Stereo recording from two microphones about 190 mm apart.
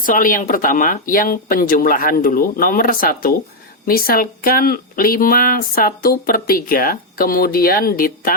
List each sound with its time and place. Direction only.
0.0 s speech: 45° left (ahead or behind)